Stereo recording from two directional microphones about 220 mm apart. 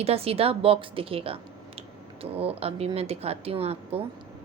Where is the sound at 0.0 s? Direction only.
25° right (ahead or behind).